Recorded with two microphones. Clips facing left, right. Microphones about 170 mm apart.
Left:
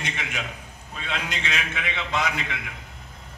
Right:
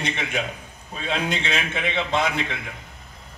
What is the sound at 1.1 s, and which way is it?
A man's voice, 30° right (ahead or behind).